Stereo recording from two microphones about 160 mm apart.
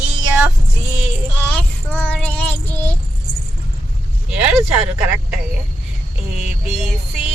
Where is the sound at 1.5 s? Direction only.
10° left (ahead or behind).